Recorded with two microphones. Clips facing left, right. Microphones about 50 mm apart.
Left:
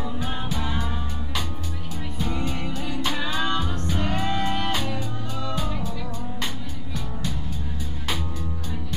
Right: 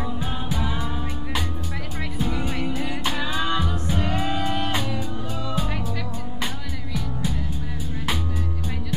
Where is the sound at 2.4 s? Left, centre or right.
Centre.